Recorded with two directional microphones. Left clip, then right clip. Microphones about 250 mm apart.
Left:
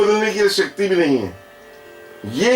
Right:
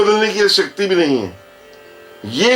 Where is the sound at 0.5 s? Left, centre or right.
Right.